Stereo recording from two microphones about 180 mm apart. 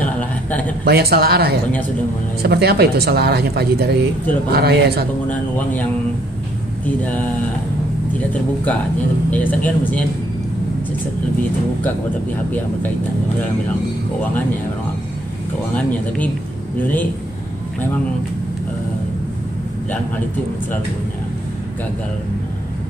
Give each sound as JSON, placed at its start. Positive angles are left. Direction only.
{"t": 0.0, "sound": "a sound", "side_deg": 10}
{"t": 0.8, "sound": "a woman's voice", "side_deg": -65}
{"t": 5.3, "sound": "speech", "side_deg": 10}
{"t": 7.0, "sound": "speech", "side_deg": 10}
{"t": 9.3, "sound": "speech", "side_deg": 10}
{"t": 16.7, "sound": "speech", "side_deg": 10}